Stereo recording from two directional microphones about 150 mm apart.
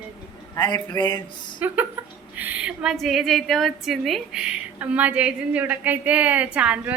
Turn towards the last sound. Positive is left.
turn(degrees=-5)  # may be behind; listen again after turning